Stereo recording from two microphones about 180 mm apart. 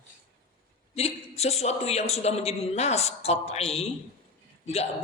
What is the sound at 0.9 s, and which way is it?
A man's voice, 35° left (ahead or behind).